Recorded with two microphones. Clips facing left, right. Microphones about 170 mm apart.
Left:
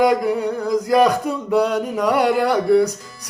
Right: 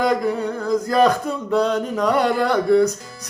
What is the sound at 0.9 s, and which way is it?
Speech, 15° left (ahead or behind).